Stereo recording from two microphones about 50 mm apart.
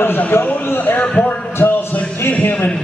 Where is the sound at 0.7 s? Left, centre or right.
Left.